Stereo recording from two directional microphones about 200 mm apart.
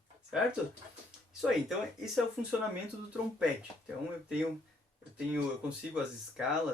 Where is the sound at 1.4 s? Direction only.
Centre (ahead or behind).